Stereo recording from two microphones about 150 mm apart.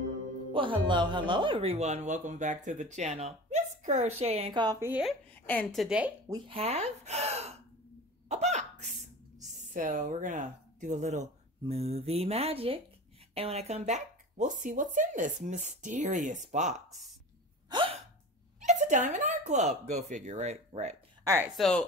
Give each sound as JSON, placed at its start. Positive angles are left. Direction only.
{"t": 0.5, "sound": "speech", "side_deg": -35}
{"t": 5.3, "sound": "a woman's voice", "side_deg": 10}
{"t": 6.2, "sound": "speech", "side_deg": -25}
{"t": 6.5, "sound": "speech", "side_deg": -45}
{"t": 8.3, "sound": "hiccup", "side_deg": -50}
{"t": 9.4, "sound": "speech", "side_deg": -60}
{"t": 17.6, "sound": "hiccup", "side_deg": -35}
{"t": 18.6, "sound": "speech", "side_deg": -55}
{"t": 21.2, "sound": "a sound", "side_deg": -20}
{"t": 21.5, "sound": "speech", "side_deg": 5}